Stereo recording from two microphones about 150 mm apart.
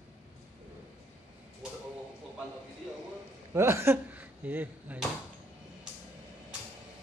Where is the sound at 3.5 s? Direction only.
15° right (ahead or behind).